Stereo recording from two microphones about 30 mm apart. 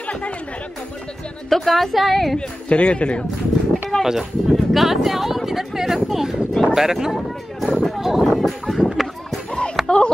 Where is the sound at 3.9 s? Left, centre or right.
Left.